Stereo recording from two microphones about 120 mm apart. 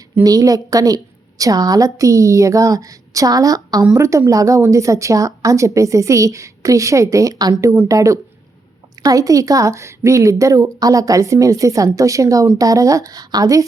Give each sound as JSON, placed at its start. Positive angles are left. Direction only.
{"t": 0.2, "sound": "a woman's voice", "side_deg": -30}